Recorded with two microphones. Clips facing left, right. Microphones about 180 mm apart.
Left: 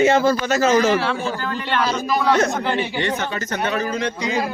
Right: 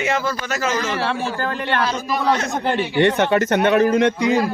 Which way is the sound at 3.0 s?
65° right (ahead or behind).